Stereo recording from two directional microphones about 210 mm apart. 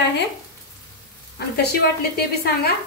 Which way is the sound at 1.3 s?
50° left (ahead or behind).